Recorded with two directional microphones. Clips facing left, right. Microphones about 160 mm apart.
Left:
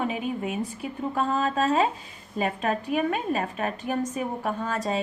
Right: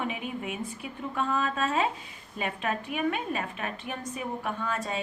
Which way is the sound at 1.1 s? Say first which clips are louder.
Left 3 dB; 40° left (ahead or behind).